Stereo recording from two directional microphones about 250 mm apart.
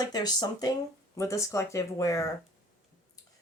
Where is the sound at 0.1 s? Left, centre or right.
Centre.